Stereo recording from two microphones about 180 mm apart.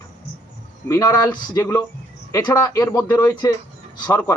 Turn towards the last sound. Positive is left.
turn(degrees=10)  # may be behind; listen again after turning